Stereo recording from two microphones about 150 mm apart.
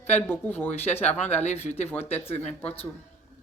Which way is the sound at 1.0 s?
45° left (ahead or behind).